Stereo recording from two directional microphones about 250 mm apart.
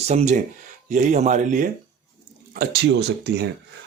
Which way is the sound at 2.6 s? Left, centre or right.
Right.